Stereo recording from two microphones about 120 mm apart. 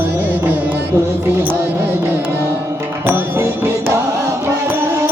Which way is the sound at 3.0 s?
20° right (ahead or behind).